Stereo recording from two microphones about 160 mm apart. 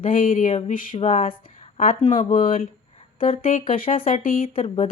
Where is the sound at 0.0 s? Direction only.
60° left (ahead or behind).